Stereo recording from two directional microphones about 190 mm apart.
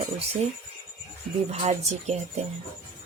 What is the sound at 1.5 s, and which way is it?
Speech, 40° right (ahead or behind).